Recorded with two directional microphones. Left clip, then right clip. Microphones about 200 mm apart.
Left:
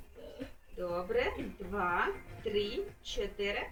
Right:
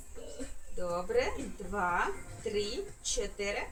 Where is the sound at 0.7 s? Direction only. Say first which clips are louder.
Right 2 dB; 20° right (ahead or behind).